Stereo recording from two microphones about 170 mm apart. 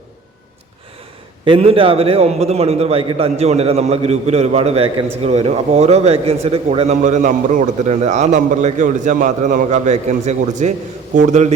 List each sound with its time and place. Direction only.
1.5 s a man's voice: 35° right (ahead or behind)